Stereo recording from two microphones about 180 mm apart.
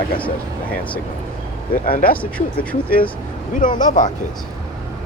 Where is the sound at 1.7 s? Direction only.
50° left (ahead or behind).